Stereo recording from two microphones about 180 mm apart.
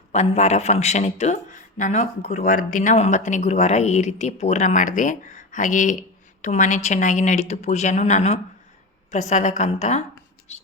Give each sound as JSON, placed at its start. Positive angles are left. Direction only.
{"t": 0.1, "sound": "speech", "side_deg": 40}